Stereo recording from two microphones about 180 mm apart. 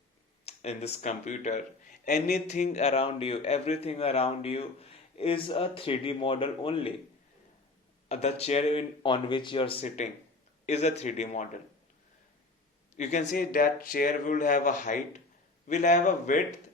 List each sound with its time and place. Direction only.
0.4 s a man's voice: 35° left (ahead or behind)
2.0 s a sound: 60° left (ahead or behind)
2.3 s a man's voice: 40° left (ahead or behind)
8.0 s a man's voice: 35° left (ahead or behind)
13.0 s speech: 40° left (ahead or behind)